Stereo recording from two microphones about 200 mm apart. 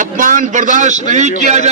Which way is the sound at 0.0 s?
40° right (ahead or behind).